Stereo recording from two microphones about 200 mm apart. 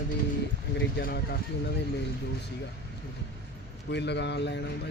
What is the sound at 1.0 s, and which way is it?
Speech, 50° left (ahead or behind).